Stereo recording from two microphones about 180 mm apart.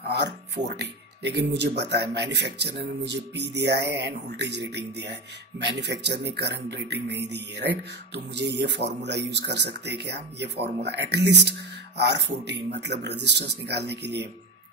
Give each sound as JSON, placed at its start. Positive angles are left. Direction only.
{"t": 0.1, "sound": "a man's voice", "side_deg": -70}